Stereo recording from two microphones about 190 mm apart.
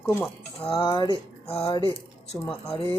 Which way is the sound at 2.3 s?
15° left (ahead or behind).